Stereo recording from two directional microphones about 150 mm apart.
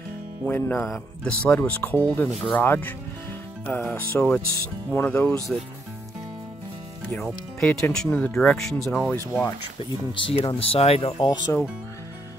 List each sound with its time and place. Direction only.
0.5 s speech: 10° left (ahead or behind)
7.1 s speech: 5° left (ahead or behind)
10.1 s speech: 35° left (ahead or behind)